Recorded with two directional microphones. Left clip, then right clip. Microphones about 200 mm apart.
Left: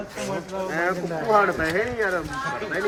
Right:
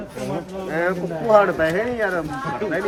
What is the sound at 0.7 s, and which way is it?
Speech, 50° right (ahead or behind).